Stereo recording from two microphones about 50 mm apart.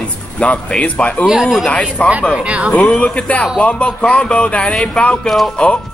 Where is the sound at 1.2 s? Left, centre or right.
Centre.